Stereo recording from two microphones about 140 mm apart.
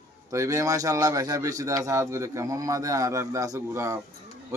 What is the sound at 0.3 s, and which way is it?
Speech, 25° right (ahead or behind).